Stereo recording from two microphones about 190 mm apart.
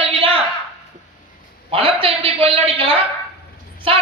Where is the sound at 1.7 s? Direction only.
30° right (ahead or behind).